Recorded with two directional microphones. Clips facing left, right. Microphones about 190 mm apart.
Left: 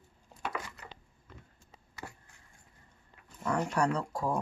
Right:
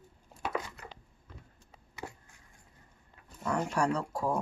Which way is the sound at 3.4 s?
5° right (ahead or behind).